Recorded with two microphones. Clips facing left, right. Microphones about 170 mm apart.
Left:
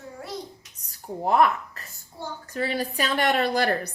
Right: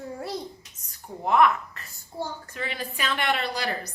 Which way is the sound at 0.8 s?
35° left (ahead or behind).